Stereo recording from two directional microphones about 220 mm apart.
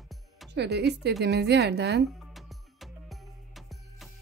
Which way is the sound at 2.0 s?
Centre (ahead or behind).